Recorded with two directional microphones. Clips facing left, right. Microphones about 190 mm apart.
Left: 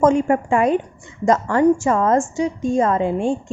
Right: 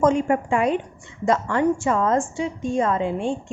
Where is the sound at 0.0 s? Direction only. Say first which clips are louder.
Left 3 dB; 45° left (ahead or behind).